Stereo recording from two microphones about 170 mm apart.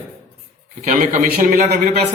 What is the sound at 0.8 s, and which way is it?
A man's voice, 50° right (ahead or behind).